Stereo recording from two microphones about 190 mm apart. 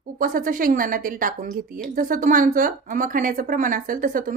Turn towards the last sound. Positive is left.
turn(degrees=-45)  # may be behind; listen again after turning